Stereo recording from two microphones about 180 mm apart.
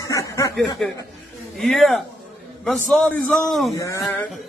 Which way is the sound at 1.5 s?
Centre (ahead or behind).